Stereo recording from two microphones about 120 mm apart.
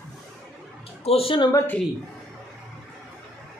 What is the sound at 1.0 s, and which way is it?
Speech, 50° left (ahead or behind).